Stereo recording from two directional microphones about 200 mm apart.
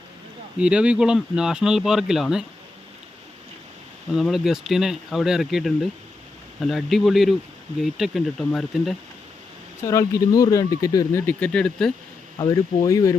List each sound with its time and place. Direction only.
0.6 s speech: 5° right (ahead or behind)
4.1 s speech: centre (ahead or behind)
9.8 s speech: 15° left (ahead or behind)
12.4 s speech: 15° left (ahead or behind)